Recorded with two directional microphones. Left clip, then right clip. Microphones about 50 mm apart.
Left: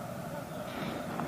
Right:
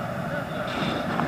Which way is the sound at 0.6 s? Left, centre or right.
Left.